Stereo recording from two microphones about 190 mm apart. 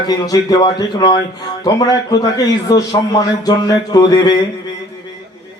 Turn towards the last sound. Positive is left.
turn(degrees=20)  # may be behind; listen again after turning